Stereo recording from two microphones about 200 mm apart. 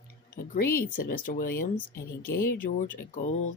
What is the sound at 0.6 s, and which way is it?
Speech, 10° left (ahead or behind).